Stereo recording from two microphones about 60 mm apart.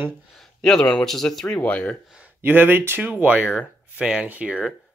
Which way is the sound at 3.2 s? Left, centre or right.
Right.